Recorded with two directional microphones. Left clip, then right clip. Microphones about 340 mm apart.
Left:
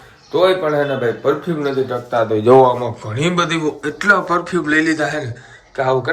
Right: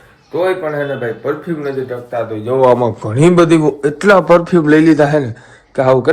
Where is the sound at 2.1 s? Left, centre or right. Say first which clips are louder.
Left 7 dB; left.